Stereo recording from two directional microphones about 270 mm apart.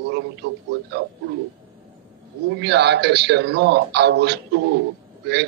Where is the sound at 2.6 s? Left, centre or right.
Right.